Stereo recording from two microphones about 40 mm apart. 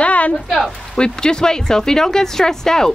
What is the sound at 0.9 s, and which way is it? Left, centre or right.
A woman's voice, left.